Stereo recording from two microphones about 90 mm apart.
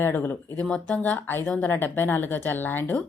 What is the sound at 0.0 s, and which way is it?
Speech, 25° left (ahead or behind).